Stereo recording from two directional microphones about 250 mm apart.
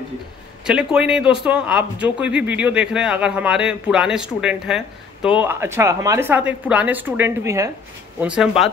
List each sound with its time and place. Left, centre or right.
0.7 s a man's voice: centre